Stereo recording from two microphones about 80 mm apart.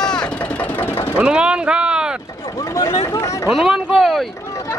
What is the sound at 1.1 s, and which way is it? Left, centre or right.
Speech, centre.